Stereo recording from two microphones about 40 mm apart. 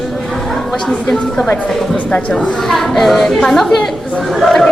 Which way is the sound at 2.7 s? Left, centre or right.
Centre.